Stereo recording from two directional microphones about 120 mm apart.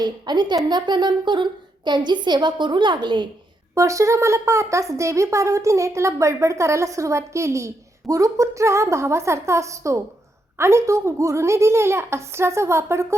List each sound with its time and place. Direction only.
0.0 s a woman's voice: 35° right (ahead or behind)
3.8 s speech: 25° right (ahead or behind)